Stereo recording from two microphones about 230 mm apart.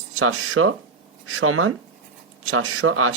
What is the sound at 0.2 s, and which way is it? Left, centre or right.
Speech, right.